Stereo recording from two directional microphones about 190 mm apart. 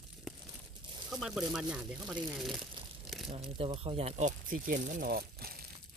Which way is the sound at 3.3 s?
30° right (ahead or behind).